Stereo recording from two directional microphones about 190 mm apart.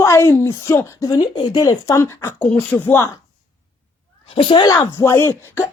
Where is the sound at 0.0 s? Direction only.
15° left (ahead or behind).